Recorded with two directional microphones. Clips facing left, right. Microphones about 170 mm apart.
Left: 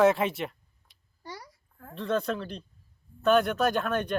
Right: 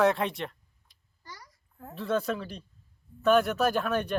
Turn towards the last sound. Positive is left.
turn(degrees=-5)  # may be behind; listen again after turning